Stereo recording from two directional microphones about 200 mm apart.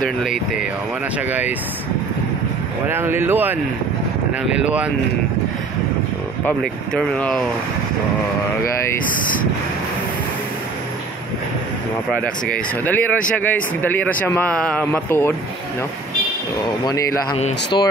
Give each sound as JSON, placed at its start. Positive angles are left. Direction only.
{"t": 0.0, "sound": "speech", "side_deg": 0}
{"t": 2.9, "sound": "speech", "side_deg": -10}
{"t": 6.4, "sound": "speech", "side_deg": 5}
{"t": 12.2, "sound": "speech", "side_deg": 10}
{"t": 16.8, "sound": "speech", "side_deg": 20}